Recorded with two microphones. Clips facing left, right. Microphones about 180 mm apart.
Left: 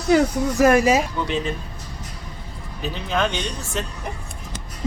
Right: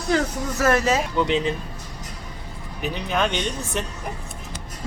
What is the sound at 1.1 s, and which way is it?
Speech, 20° right (ahead or behind).